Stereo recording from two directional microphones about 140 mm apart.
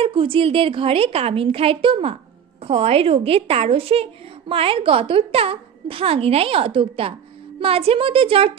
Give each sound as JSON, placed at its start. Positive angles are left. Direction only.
{"t": 0.0, "sound": "a woman's voice", "side_deg": -40}